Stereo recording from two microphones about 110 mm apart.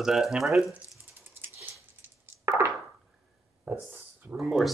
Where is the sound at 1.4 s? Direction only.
20° right (ahead or behind).